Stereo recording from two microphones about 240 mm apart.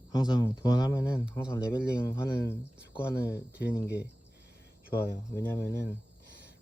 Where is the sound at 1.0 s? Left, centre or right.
Centre.